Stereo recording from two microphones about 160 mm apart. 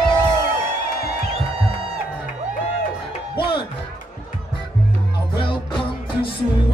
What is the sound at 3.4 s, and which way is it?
Music, 30° left (ahead or behind).